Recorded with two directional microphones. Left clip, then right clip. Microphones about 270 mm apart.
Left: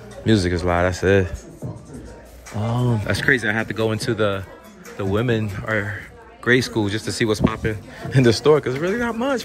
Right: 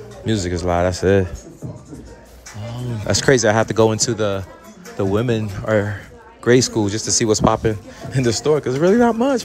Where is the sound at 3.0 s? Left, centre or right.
Centre.